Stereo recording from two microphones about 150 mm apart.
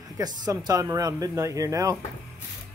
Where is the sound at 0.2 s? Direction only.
25° right (ahead or behind).